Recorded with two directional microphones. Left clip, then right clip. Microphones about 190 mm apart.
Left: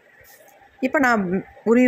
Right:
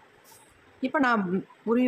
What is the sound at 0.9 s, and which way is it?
Speech, 20° left (ahead or behind).